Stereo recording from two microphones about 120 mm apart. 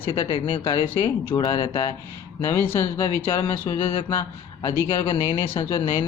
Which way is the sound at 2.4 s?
20° left (ahead or behind).